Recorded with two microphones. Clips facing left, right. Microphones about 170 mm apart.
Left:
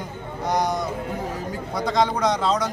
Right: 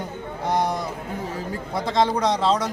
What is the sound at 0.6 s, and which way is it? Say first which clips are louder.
A man's voice: left 1 dB; 25° right (ahead or behind).